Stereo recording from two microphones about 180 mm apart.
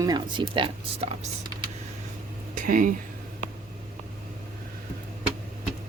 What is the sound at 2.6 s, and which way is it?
Speech, 50° right (ahead or behind).